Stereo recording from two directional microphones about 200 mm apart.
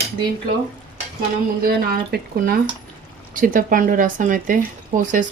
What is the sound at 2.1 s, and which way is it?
Speech, 50° right (ahead or behind).